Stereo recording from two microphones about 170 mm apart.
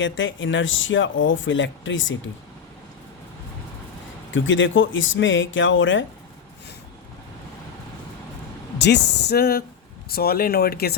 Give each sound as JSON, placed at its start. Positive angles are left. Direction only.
{"t": 0.0, "sound": "speech", "side_deg": 90}
{"t": 4.3, "sound": "speech", "side_deg": 90}
{"t": 8.8, "sound": "speech", "side_deg": 85}